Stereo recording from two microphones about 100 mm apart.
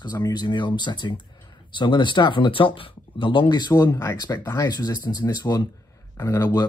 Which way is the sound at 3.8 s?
25° left (ahead or behind).